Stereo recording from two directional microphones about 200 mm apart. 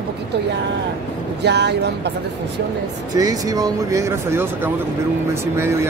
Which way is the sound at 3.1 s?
15° right (ahead or behind).